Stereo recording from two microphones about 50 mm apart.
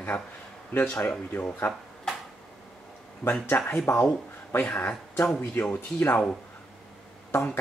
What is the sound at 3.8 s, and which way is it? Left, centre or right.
Speech, left.